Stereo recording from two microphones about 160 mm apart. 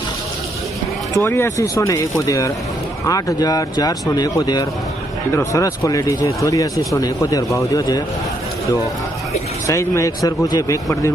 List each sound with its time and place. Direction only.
1.1 s speech: 15° left (ahead or behind)
9.6 s speech: 20° left (ahead or behind)